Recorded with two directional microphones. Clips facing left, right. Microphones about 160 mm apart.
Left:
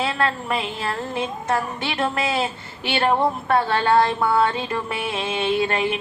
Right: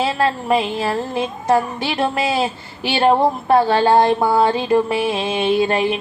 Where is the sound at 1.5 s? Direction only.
30° right (ahead or behind).